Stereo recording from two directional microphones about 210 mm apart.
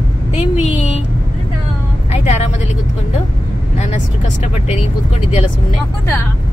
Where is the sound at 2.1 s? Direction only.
30° left (ahead or behind).